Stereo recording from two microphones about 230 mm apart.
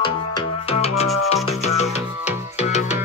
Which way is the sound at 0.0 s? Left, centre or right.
Left.